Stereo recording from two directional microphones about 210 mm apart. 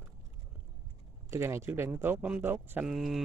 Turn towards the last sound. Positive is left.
turn(degrees=0)  # may be behind; listen again after turning